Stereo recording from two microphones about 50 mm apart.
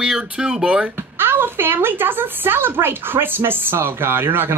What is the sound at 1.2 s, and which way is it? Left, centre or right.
Speech, right.